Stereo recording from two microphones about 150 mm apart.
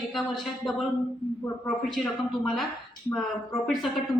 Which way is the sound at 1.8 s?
Centre (ahead or behind).